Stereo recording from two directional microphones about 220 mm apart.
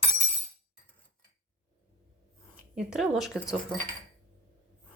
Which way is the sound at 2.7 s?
5° right (ahead or behind).